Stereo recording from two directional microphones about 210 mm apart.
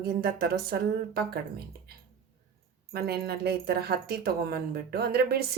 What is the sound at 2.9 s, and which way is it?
A woman's voice, 50° right (ahead or behind).